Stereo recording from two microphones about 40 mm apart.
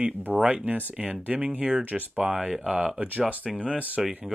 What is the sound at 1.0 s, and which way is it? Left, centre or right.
Speech, right.